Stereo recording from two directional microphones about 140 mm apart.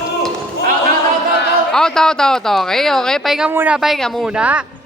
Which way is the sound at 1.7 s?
5° left (ahead or behind).